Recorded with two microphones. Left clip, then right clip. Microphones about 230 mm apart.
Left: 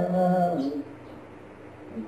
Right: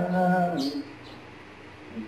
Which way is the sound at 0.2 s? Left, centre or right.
Right.